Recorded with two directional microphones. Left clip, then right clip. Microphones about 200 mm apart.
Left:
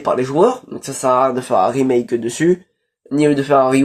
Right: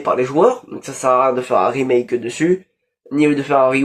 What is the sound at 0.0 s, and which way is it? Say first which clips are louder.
Speech: even; 60° left (ahead or behind).